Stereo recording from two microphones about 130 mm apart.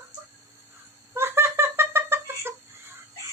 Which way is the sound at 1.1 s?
20° right (ahead or behind).